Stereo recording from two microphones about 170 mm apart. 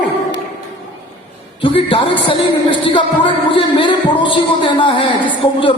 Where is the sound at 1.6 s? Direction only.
30° left (ahead or behind).